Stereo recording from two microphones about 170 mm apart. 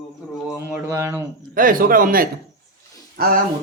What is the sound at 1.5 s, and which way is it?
A man's voice, 55° right (ahead or behind).